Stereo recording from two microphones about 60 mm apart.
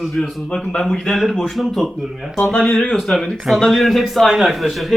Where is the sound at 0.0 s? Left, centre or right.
Centre.